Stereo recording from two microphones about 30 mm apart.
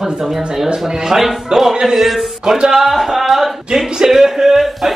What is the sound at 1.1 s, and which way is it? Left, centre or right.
Speech, centre.